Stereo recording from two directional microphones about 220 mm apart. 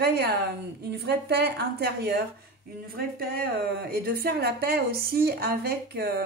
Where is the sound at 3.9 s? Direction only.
45° right (ahead or behind).